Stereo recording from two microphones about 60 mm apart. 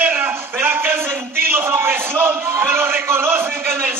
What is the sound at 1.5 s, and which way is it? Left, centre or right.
A man's voice, right.